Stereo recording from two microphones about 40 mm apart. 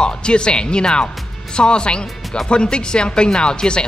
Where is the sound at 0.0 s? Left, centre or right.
Left.